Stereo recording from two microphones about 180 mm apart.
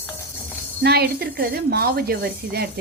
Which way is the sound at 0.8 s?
60° right (ahead or behind).